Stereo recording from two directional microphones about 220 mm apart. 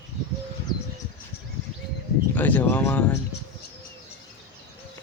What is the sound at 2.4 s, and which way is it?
Speech, 10° left (ahead or behind).